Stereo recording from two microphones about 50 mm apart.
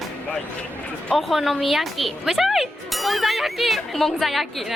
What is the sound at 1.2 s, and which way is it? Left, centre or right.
Speech, centre.